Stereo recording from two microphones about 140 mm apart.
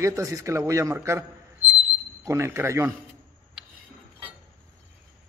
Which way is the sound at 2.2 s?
20° right (ahead or behind).